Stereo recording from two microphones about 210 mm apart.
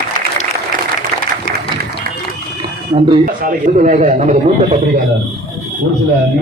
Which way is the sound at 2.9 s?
25° right (ahead or behind).